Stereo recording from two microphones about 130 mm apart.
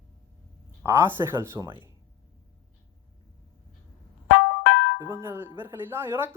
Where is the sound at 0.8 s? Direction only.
20° right (ahead or behind).